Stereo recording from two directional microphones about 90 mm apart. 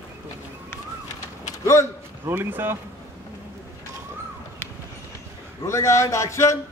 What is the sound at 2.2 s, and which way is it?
Speech, 25° right (ahead or behind).